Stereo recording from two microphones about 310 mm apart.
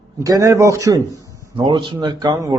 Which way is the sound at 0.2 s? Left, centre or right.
Centre.